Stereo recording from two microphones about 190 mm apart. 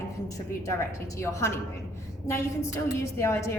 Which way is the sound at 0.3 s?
15° left (ahead or behind).